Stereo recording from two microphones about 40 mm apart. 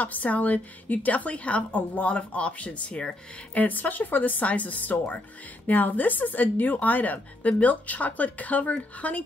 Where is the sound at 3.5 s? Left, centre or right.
Left.